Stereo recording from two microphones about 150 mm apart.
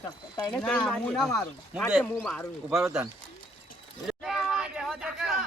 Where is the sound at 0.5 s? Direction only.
5° left (ahead or behind).